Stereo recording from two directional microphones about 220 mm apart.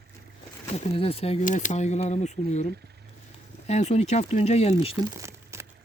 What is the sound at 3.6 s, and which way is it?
Speech, 30° left (ahead or behind).